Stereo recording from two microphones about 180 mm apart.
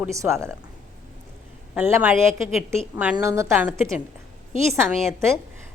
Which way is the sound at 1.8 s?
10° right (ahead or behind).